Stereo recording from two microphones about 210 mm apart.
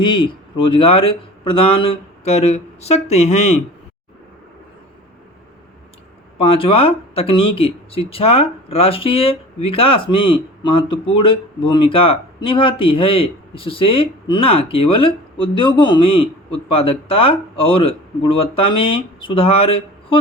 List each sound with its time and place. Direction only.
0.0 s speech: 20° left (ahead or behind)
6.4 s speech: 25° left (ahead or behind)